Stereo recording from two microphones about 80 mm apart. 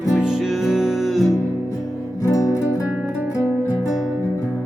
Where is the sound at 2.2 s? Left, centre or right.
Left.